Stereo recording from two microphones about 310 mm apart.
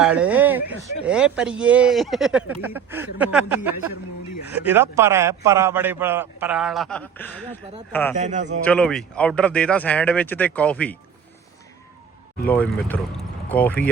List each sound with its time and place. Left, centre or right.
0.0 s a man's voice: centre
8.1 s a man's voice: right
8.6 s speech: centre
12.5 s speech: centre